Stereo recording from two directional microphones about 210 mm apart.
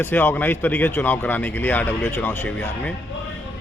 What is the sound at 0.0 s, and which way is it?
A man's voice, 10° left (ahead or behind).